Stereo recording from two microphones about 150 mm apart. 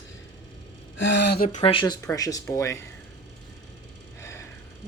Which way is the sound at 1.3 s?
75° left (ahead or behind).